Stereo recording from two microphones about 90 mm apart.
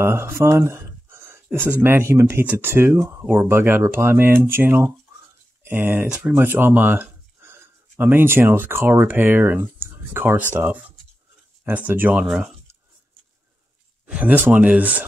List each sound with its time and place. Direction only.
0.0 s a sound: 30° right (ahead or behind)
1.7 s speech: 25° right (ahead or behind)
6.3 s a sound: 25° right (ahead or behind)
7.9 s speech: 20° right (ahead or behind)
11.6 s speech: 20° right (ahead or behind)
14.0 s speech: 15° right (ahead or behind)